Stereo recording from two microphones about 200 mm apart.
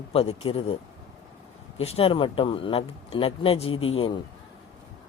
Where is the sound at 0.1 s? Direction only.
30° left (ahead or behind).